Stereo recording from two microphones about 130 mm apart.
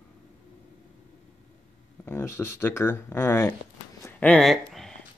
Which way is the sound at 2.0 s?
20° left (ahead or behind).